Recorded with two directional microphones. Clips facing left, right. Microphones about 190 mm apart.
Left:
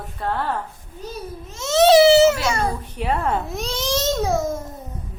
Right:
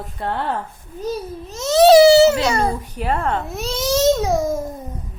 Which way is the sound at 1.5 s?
40° right (ahead or behind).